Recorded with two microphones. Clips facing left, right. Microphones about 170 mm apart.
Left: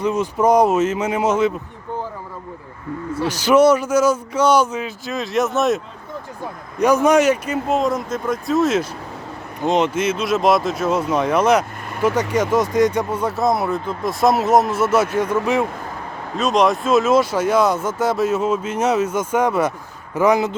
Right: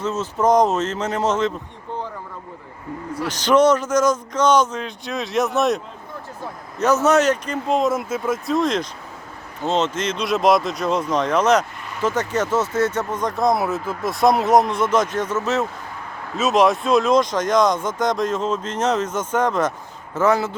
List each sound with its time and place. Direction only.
0.0 s speech: 15° left (ahead or behind)
3.2 s speech: 10° left (ahead or behind)
6.4 s speech: 15° left (ahead or behind)
16.4 s speech: centre (ahead or behind); by 20.6 s 15° left (ahead or behind)